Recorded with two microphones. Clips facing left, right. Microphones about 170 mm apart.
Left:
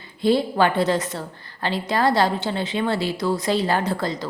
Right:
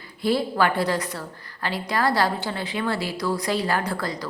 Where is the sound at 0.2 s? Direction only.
25° left (ahead or behind).